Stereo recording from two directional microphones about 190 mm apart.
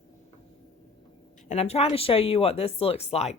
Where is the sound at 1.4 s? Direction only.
35° left (ahead or behind).